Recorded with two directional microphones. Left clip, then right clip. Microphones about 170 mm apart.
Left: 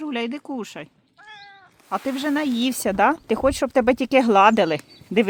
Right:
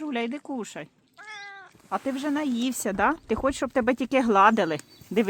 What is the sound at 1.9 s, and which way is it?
Speech, 10° left (ahead or behind).